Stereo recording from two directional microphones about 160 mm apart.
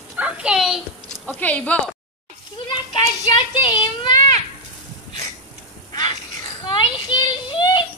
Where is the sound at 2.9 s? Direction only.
30° left (ahead or behind).